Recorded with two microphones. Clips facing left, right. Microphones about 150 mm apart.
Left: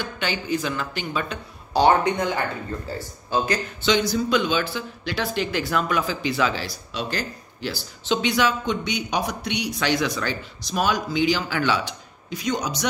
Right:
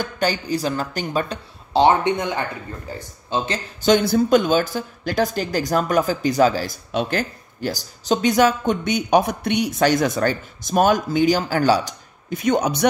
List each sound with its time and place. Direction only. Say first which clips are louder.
0.0 s a woman's voice: right 5 dB; 40° right (ahead or behind)
1.7 s speech: right 2 dB; 25° right (ahead or behind)
3.8 s speech: right 6 dB; 55° right (ahead or behind)